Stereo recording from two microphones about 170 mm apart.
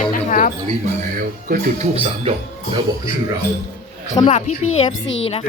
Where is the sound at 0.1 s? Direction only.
50° left (ahead or behind).